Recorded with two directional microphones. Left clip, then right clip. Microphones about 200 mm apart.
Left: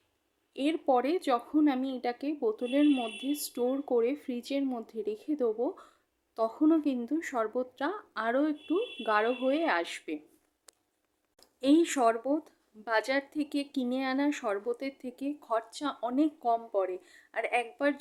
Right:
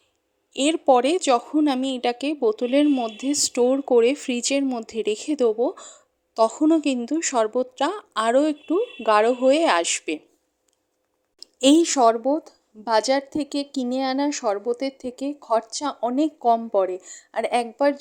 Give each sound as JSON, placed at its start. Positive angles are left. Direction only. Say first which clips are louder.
{"t": 0.5, "sound": "a woman's voice", "louder": "right 10 dB", "side_deg": -30}
{"t": 11.3, "sound": "a woman's voice", "louder": "right 9 dB", "side_deg": -30}